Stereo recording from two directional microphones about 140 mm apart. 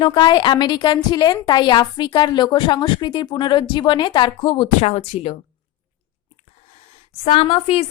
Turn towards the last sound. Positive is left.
turn(degrees=45)  # may be behind; listen again after turning